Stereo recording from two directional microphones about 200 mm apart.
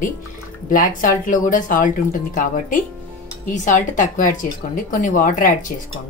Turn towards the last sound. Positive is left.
turn(degrees=40)  # may be behind; listen again after turning